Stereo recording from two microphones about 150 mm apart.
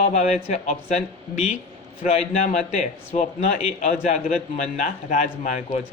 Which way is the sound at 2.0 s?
45° left (ahead or behind).